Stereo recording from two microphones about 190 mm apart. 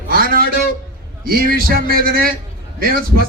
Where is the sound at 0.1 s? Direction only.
50° right (ahead or behind).